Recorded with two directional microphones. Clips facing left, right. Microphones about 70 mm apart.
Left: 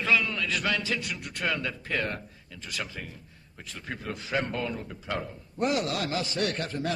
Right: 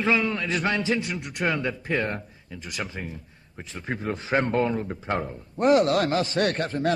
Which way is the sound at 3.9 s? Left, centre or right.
Right.